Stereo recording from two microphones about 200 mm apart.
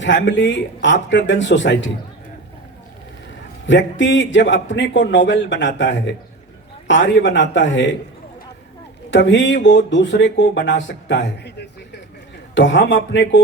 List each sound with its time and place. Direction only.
0.0 s a man's voice: 65° left (ahead or behind)
3.7 s a man's voice: 65° left (ahead or behind)
9.0 s a man's voice: 65° left (ahead or behind)